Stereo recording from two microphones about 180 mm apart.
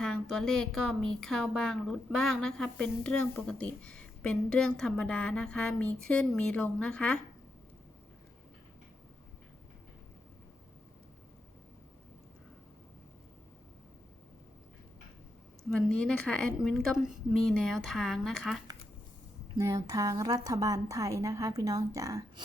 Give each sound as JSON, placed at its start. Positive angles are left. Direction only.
{"t": 0.0, "sound": "a woman's voice", "side_deg": 5}
{"t": 15.7, "sound": "a woman's voice", "side_deg": 5}
{"t": 19.5, "sound": "a woman's voice", "side_deg": -15}